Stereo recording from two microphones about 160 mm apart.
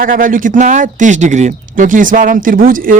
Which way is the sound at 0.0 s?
60° right (ahead or behind).